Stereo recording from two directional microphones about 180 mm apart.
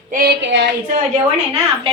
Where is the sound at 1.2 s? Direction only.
35° right (ahead or behind).